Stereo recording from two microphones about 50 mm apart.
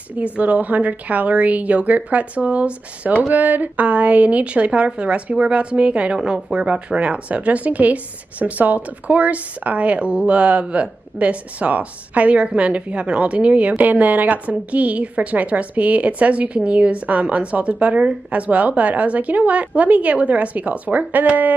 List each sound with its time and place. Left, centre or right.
0.1 s a woman's voice: right